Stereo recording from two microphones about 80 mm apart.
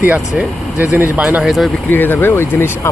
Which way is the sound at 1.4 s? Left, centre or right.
Centre.